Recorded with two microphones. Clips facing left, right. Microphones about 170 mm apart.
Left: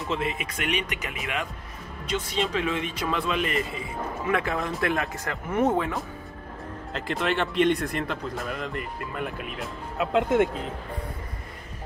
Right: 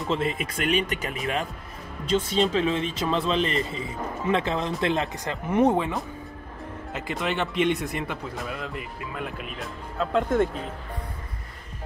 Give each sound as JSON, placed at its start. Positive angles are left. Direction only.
{"t": 0.1, "sound": "speech", "side_deg": -30}
{"t": 6.9, "sound": "speech", "side_deg": 0}
{"t": 9.9, "sound": "speech", "side_deg": 10}